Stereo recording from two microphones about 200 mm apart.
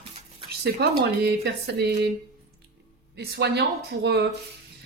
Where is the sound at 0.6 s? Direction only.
50° right (ahead or behind).